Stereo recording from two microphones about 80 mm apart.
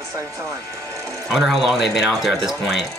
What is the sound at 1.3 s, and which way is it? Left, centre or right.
Speech, centre.